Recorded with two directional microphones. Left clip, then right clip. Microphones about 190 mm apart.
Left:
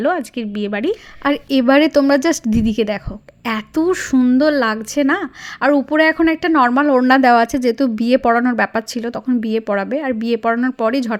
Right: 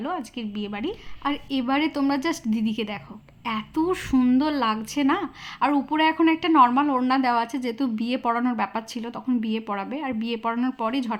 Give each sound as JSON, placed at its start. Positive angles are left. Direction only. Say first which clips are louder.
{"t": 0.0, "sound": "a woman's voice", "louder": "left 12 dB", "side_deg": 35}